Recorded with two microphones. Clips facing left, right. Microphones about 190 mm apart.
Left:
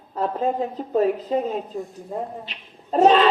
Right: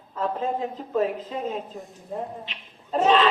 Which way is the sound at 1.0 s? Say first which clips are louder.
Left 5 dB; 40° left (ahead or behind).